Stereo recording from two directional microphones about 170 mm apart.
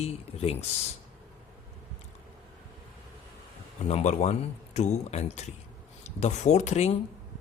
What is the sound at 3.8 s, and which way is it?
Speech, 40° left (ahead or behind).